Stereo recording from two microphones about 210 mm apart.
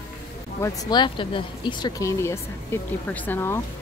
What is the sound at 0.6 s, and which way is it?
Speech, 20° left (ahead or behind).